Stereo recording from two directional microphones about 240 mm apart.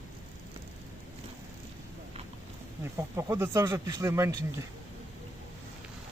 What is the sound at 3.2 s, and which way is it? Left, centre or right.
Speech, centre.